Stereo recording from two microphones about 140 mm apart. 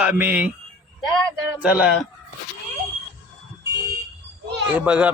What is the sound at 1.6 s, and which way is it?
Speech, 5° right (ahead or behind).